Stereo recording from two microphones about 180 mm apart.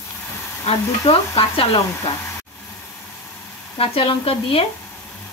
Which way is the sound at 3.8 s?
30° left (ahead or behind).